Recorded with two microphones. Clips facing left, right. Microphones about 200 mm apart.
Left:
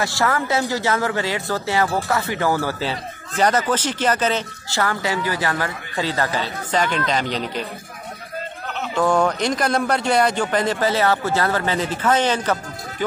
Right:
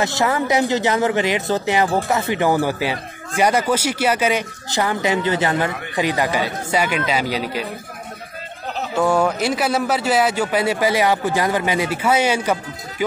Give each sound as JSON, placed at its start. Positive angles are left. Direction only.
{"t": 0.0, "sound": "speech", "side_deg": -20}
{"t": 8.9, "sound": "speech", "side_deg": -10}